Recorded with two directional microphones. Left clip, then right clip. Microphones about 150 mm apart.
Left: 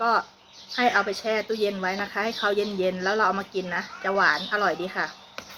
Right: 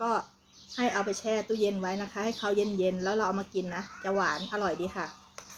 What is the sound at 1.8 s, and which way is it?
Speech, 30° right (ahead or behind).